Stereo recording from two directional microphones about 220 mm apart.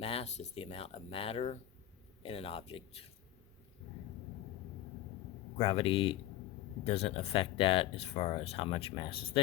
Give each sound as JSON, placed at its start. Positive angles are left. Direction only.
{"t": 0.0, "sound": "speech", "side_deg": 25}
{"t": 5.5, "sound": "speech", "side_deg": 25}